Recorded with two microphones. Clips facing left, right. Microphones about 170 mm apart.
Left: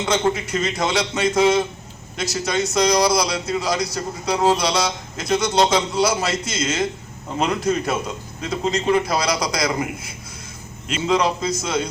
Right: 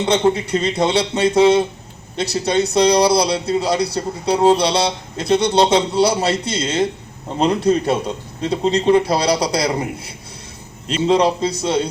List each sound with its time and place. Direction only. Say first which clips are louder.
0.0 s speech: right 4 dB; 30° right (ahead or behind)